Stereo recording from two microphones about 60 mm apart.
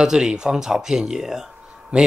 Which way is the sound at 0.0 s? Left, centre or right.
Centre.